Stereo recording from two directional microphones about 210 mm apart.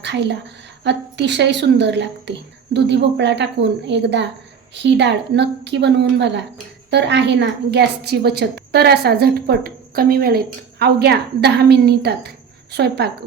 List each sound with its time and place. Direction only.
0.0 s a woman's voice: 55° right (ahead or behind)